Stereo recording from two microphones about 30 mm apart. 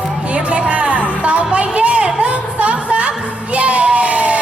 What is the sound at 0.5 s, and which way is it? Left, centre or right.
Music, right.